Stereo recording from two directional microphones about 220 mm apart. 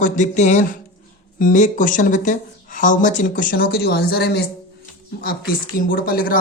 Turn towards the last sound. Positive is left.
turn(degrees=40)  # may be behind; listen again after turning